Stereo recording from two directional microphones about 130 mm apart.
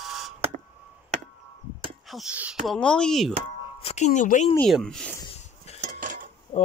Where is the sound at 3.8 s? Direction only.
65° left (ahead or behind).